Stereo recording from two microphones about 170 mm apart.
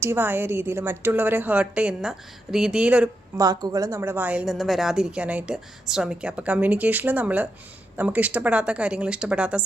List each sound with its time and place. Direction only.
0.0 s speech: 15° right (ahead or behind)
3.3 s speech: 20° right (ahead or behind)